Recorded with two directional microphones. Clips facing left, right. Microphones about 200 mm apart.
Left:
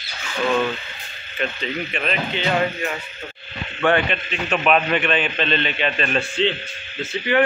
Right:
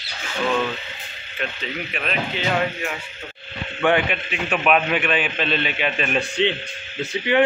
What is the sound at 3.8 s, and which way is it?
A man's voice, 10° right (ahead or behind).